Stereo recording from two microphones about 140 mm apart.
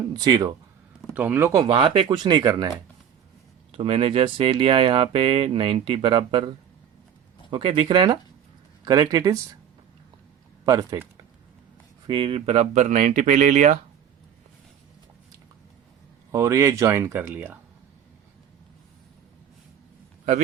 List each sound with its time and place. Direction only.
0.1 s speech: 25° right (ahead or behind)
1.1 s speech: 10° right (ahead or behind)
1.6 s speech: 35° right (ahead or behind)
3.7 s speech: 40° right (ahead or behind)
7.5 s speech: 40° right (ahead or behind)
10.7 s speech: 20° right (ahead or behind)
12.0 s speech: 40° right (ahead or behind); by 13.7 s 60° right (ahead or behind)
16.3 s speech: 20° right (ahead or behind)